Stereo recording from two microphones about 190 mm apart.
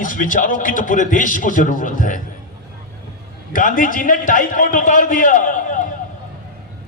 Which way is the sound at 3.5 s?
45° left (ahead or behind).